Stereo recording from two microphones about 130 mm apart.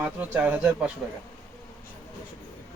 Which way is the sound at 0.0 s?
10° right (ahead or behind).